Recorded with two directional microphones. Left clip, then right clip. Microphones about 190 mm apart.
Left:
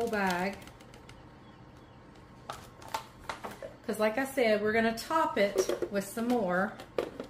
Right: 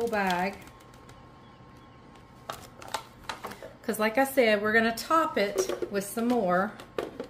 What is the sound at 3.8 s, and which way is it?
A woman's voice, 55° right (ahead or behind).